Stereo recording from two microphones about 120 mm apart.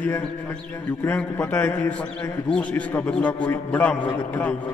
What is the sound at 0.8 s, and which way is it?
A man's voice, 15° left (ahead or behind).